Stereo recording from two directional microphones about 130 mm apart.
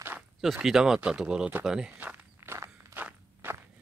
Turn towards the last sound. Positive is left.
turn(degrees=-15)  # may be behind; listen again after turning